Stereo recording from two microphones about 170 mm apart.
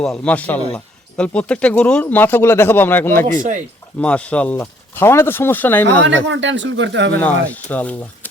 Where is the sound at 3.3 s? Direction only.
50° right (ahead or behind).